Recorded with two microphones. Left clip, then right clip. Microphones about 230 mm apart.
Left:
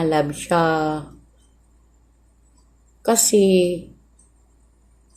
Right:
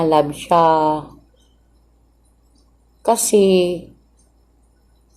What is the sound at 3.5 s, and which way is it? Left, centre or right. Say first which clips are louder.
Speech: right 2 dB; left.